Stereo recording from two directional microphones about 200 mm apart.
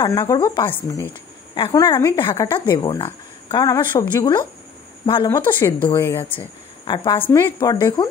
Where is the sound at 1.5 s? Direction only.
25° left (ahead or behind).